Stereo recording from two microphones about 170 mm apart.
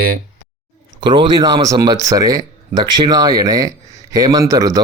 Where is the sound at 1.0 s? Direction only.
30° right (ahead or behind).